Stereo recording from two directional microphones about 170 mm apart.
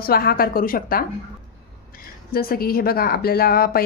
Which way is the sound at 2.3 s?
60° left (ahead or behind).